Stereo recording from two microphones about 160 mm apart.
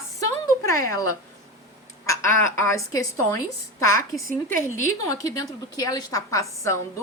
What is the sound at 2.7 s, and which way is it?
A woman's voice, 20° left (ahead or behind).